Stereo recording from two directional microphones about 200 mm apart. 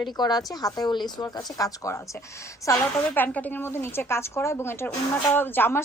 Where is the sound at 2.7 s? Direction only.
5° left (ahead or behind).